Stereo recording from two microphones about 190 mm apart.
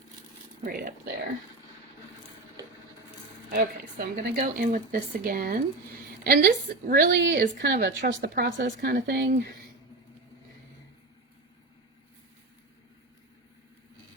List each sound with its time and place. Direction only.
0.6 s speech: 50° right (ahead or behind)
3.5 s speech: 55° right (ahead or behind)
7.1 s a woman's voice: 65° right (ahead or behind)